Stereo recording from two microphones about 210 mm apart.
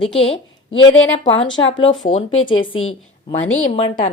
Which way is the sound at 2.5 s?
25° left (ahead or behind).